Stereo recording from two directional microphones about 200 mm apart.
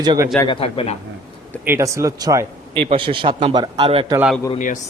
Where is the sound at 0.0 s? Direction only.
20° right (ahead or behind).